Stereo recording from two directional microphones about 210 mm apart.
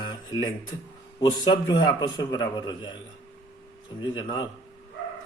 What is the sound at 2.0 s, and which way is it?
Speech, 20° left (ahead or behind).